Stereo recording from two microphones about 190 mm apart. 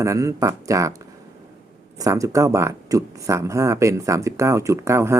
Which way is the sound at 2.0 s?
15° right (ahead or behind).